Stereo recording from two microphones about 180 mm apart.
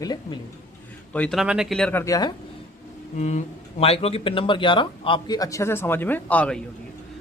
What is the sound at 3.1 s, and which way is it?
A man's voice, 40° left (ahead or behind).